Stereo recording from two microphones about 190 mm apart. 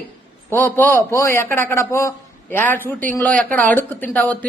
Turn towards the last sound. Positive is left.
turn(degrees=10)  # may be behind; listen again after turning